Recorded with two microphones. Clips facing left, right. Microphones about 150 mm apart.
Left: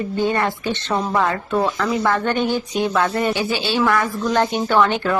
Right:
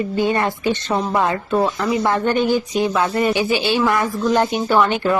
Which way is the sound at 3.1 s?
15° right (ahead or behind).